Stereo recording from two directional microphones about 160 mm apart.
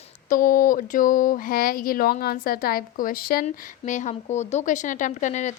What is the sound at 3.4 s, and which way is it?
A woman's voice, 50° left (ahead or behind).